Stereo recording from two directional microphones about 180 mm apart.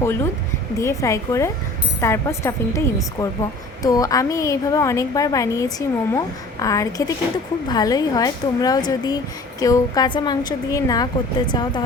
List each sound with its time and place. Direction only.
0.8 s a woman's voice: 15° left (ahead or behind)